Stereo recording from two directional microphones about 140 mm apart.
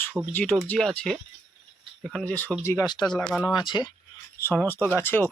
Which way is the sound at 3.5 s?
30° left (ahead or behind).